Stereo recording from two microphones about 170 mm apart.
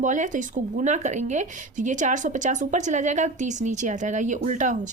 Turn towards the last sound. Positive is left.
turn(degrees=-45)  # may be behind; listen again after turning